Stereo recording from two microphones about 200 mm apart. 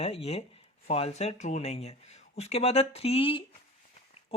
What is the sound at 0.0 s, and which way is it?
Speech, 30° left (ahead or behind).